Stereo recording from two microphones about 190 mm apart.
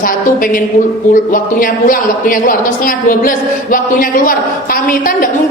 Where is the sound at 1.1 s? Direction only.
45° left (ahead or behind).